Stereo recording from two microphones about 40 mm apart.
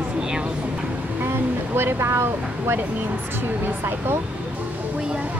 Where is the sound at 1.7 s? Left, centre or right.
Right.